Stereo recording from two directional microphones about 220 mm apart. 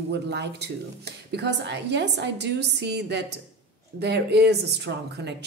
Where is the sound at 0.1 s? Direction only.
50° right (ahead or behind).